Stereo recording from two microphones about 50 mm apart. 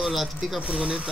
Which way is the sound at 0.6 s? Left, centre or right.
Centre.